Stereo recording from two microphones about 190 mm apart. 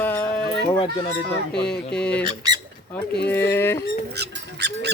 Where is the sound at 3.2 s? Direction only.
10° left (ahead or behind).